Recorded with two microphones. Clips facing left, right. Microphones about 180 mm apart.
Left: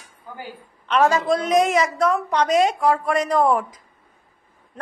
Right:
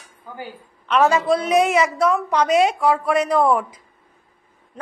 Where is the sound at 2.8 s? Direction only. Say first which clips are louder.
Right 1 dB; 5° right (ahead or behind).